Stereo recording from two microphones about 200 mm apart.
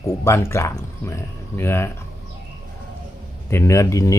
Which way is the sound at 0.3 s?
15° left (ahead or behind).